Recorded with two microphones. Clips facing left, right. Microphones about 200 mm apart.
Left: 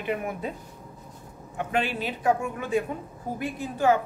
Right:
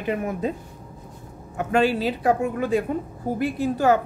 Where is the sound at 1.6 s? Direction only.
40° right (ahead or behind).